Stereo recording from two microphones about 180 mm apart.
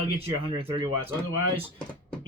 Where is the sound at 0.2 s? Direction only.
30° right (ahead or behind).